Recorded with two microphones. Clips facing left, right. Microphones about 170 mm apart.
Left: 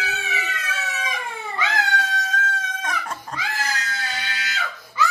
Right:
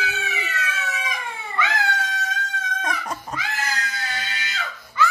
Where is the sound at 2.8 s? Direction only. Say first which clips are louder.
Right 1 dB; 10° right (ahead or behind).